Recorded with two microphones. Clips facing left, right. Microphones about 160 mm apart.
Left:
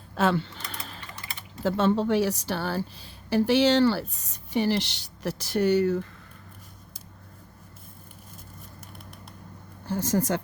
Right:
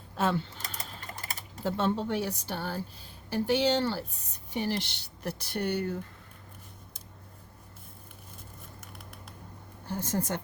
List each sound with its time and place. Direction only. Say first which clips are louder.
0.2 s a woman's voice: left 4 dB; 90° left
0.7 s typing: left 1 dB; 80° left
1.2 s typing: right 1 dB; 40° right (ahead or behind)
1.6 s a woman's voice: left 6 dB; 90° left
9.8 s a woman's voice: left 6 dB; 90° left